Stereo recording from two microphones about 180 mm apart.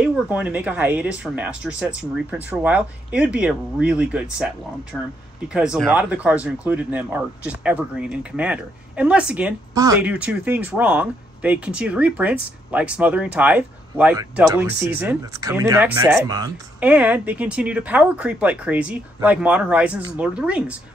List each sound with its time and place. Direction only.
0.0 s speech: 10° right (ahead or behind)
4.9 s speech: 10° left (ahead or behind)
5.5 s speech: 5° right (ahead or behind)
9.8 s speech: 20° right (ahead or behind)
10.0 s speech: 5° right (ahead or behind)
16.8 s speech: 10° right (ahead or behind)